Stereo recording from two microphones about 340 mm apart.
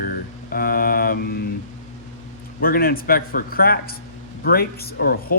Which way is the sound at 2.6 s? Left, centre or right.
Left.